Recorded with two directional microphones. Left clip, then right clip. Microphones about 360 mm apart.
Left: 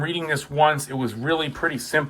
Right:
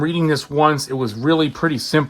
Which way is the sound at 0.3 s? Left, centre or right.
Centre.